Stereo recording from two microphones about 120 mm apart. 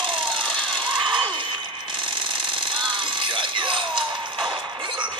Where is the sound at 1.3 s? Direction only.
45° right (ahead or behind).